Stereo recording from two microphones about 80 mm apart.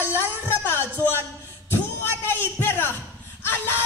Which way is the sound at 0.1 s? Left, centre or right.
Left.